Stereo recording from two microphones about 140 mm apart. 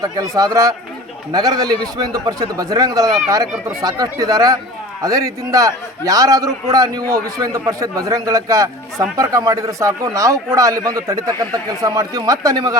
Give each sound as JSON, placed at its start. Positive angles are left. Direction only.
{"t": 0.0, "sound": "a man's voice", "side_deg": -25}